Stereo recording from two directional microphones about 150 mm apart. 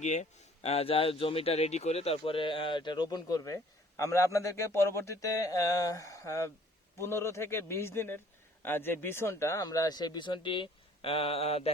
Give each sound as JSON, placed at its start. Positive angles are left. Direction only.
{"t": 0.0, "sound": "speech", "side_deg": 50}